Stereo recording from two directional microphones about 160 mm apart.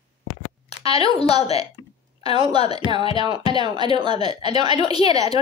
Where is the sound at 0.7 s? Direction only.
40° left (ahead or behind).